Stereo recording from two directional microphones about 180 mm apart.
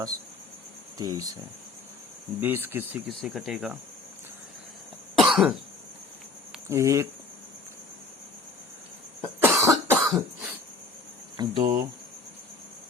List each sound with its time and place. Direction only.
0.9 s speech: 20° right (ahead or behind)
2.4 s speech: 10° right (ahead or behind)
3.1 s speech: centre (ahead or behind)
5.1 s cough: centre (ahead or behind)
6.7 s speech: 15° right (ahead or behind)
9.2 s cough: 15° right (ahead or behind)
10.0 s cough: centre (ahead or behind)
11.3 s speech: 20° right (ahead or behind)